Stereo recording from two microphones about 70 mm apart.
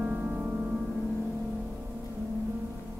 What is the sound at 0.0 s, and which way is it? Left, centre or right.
Music, centre.